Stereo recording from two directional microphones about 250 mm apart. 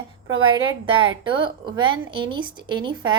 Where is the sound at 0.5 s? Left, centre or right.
Centre.